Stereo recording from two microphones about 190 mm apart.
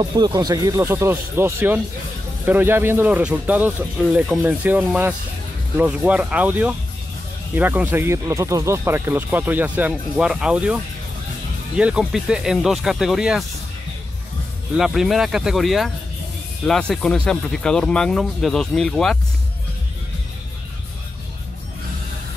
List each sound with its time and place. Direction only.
0.0 s speech: 20° right (ahead or behind); by 13.4 s centre (ahead or behind)
14.8 s speech: centre (ahead or behind)